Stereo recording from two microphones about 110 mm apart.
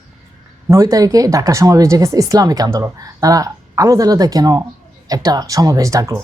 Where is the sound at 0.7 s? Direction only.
30° right (ahead or behind).